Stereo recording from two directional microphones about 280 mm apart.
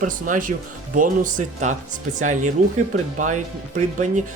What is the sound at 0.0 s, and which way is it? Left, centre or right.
Speech, right.